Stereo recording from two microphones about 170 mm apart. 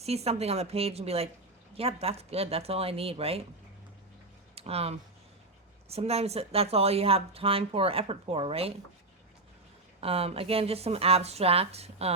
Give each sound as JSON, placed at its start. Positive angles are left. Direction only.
{"t": 0.0, "sound": "speech", "side_deg": -40}
{"t": 4.5, "sound": "speech", "side_deg": -35}
{"t": 10.0, "sound": "speech", "side_deg": -35}